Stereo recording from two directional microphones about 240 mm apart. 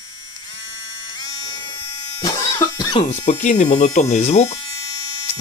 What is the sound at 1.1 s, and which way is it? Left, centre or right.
Electric shaver, centre.